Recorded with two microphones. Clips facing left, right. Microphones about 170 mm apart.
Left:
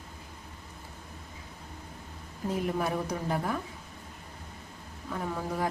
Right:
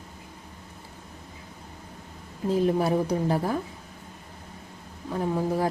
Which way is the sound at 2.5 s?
30° right (ahead or behind).